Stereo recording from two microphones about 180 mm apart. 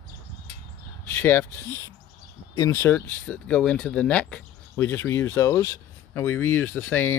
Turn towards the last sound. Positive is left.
turn(degrees=10)  # may be behind; listen again after turning